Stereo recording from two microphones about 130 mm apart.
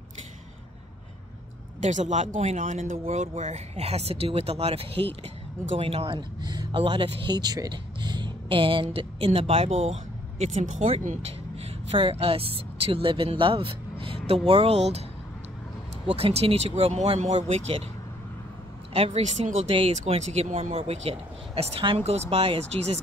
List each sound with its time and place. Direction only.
1.8 s speech: 65° right (ahead or behind)
3.1 s speech: 65° right (ahead or behind)
16.2 s speech: 45° right (ahead or behind)
18.9 s speech: 50° right (ahead or behind)